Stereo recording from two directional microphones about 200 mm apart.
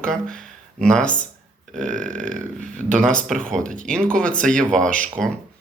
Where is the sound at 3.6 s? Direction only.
40° right (ahead or behind).